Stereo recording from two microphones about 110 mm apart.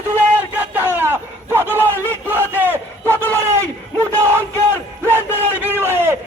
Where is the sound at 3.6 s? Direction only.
25° right (ahead or behind).